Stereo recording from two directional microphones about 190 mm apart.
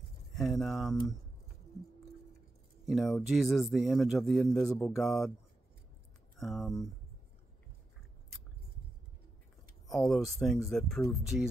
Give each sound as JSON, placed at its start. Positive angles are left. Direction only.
{"t": 0.3, "sound": "speech", "side_deg": 0}
{"t": 2.8, "sound": "speech", "side_deg": 0}
{"t": 6.4, "sound": "speech", "side_deg": 0}
{"t": 9.8, "sound": "speech", "side_deg": 0}